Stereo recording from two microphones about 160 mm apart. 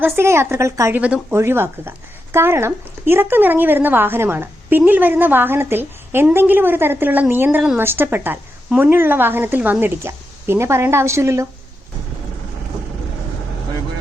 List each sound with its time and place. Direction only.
0.0 s a woman's voice: 15° right (ahead or behind)